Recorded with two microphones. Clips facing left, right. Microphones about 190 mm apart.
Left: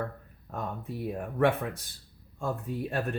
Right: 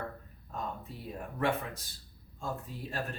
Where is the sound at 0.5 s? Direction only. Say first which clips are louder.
Left 4 dB; 60° left (ahead or behind).